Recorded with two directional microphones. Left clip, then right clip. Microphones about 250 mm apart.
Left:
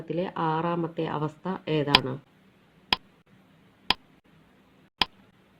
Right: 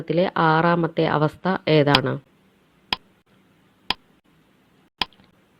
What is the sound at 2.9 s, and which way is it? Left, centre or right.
Tick, centre.